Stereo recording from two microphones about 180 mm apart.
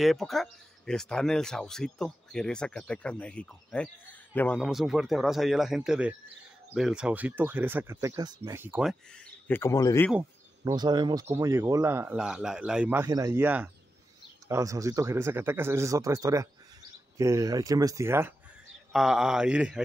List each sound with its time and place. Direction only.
0.0 s a man's voice: centre (ahead or behind); by 8.5 s 20° right (ahead or behind)
8.5 s a man's voice: 10° right (ahead or behind)
9.1 s a sound: 5° left (ahead or behind)
9.6 s speech: 15° left (ahead or behind)
10.6 s a man's voice: 25° right (ahead or behind)
13.4 s a man's voice: 10° right (ahead or behind)
18.9 s speech: centre (ahead or behind)